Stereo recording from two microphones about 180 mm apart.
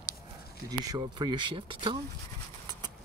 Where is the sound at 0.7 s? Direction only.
20° right (ahead or behind).